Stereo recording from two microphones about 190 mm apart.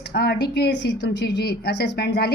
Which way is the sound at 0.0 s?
60° left (ahead or behind).